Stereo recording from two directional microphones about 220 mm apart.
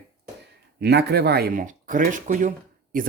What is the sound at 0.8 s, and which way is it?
Speech, 50° right (ahead or behind).